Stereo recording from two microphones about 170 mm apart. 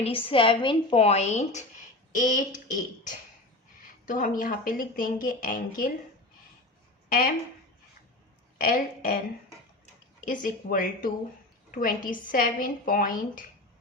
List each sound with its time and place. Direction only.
0.0 s a woman's voice: 30° left (ahead or behind); by 2.4 s 50° left (ahead or behind)
3.8 s speech: 50° left (ahead or behind)
7.1 s speech: 55° left (ahead or behind)
8.5 s speech: 55° left (ahead or behind)
10.2 s speech: 55° left (ahead or behind)